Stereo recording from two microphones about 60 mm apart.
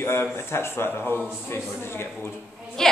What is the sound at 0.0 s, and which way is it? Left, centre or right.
A man's voice, left.